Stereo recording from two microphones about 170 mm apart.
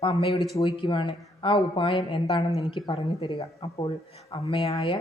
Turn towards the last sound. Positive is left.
turn(degrees=30)  # may be behind; listen again after turning